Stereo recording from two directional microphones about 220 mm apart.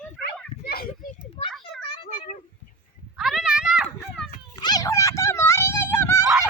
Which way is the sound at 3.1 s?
Centre (ahead or behind).